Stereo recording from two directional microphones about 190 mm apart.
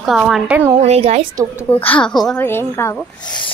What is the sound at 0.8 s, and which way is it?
Speech, 35° right (ahead or behind).